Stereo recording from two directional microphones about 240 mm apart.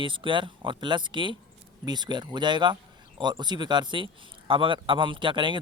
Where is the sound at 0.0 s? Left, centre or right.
Right.